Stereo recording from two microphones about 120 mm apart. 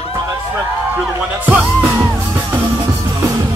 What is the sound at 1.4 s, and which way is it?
Music, 15° right (ahead or behind).